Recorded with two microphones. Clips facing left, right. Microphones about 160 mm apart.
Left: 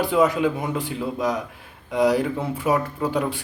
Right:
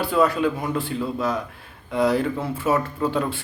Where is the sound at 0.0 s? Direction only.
15° left (ahead or behind).